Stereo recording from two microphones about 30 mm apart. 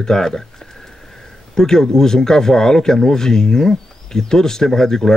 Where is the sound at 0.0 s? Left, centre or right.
Centre.